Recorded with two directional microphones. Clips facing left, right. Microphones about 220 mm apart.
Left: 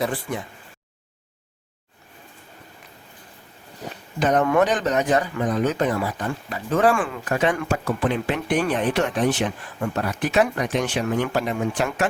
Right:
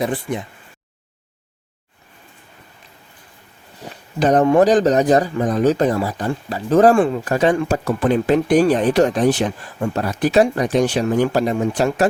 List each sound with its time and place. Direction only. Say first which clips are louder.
0.0 s speech: right 4 dB; 20° right (ahead or behind)
4.2 s speech: right 5 dB; 35° right (ahead or behind)